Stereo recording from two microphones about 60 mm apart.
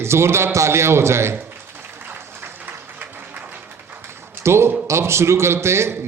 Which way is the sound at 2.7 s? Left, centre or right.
Right.